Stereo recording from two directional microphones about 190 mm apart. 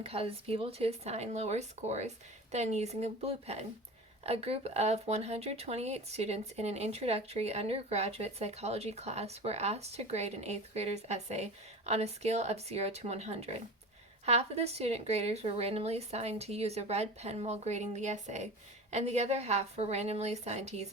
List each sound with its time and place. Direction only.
0.0 s speech: 30° right (ahead or behind)